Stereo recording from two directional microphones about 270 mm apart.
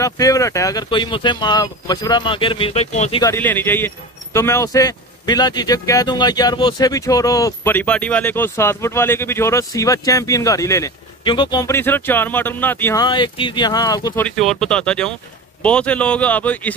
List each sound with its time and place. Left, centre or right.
0.0 s speech: centre
3.2 s speech: centre